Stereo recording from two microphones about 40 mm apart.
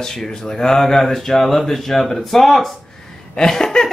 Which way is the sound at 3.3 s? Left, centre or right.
Centre.